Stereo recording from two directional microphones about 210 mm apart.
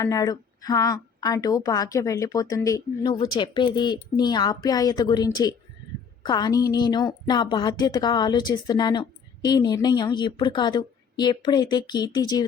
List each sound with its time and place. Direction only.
0.0 s a woman's voice: 15° left (ahead or behind)